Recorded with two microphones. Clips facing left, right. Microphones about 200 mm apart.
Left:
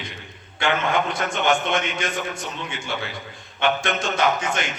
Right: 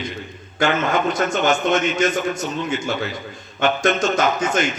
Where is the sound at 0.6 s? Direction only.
45° right (ahead or behind).